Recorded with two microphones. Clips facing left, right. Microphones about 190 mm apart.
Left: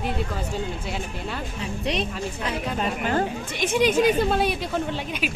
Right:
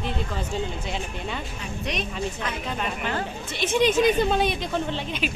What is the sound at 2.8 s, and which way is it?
Speech, 40° left (ahead or behind).